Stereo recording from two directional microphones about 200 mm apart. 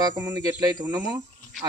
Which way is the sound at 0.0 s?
20° right (ahead or behind).